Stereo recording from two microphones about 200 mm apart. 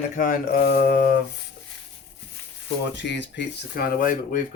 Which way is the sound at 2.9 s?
60° left (ahead or behind).